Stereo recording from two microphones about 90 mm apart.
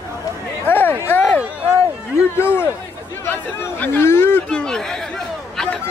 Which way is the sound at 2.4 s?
25° left (ahead or behind).